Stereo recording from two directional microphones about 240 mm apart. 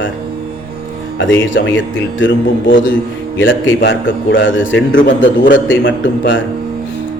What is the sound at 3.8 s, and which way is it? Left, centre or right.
Speech, left.